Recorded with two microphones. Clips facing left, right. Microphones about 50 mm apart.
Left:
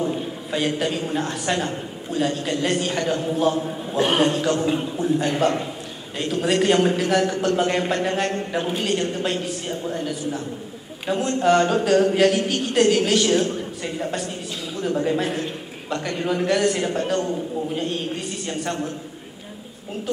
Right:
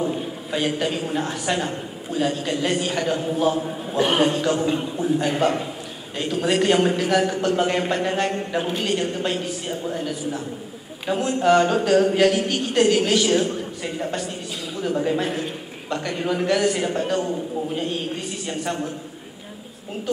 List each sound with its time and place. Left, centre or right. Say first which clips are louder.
0.0 s a man's voice: even; centre